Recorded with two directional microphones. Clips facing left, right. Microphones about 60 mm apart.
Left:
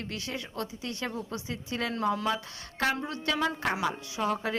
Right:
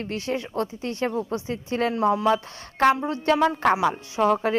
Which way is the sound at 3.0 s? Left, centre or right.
Right.